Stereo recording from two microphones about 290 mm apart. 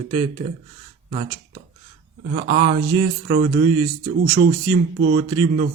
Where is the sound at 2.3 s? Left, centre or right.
Right.